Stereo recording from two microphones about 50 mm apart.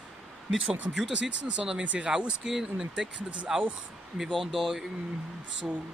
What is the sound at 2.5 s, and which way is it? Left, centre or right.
Speech, centre.